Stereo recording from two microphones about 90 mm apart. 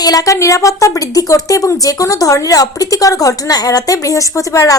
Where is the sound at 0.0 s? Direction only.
45° left (ahead or behind).